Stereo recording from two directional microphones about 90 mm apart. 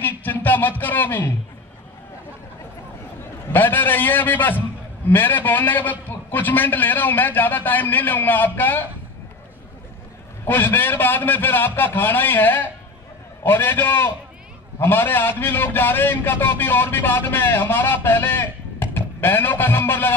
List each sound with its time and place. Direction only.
0.2 s speech: 20° left (ahead or behind)
3.5 s a man's voice: 25° left (ahead or behind)
10.4 s a man's voice: 25° left (ahead or behind)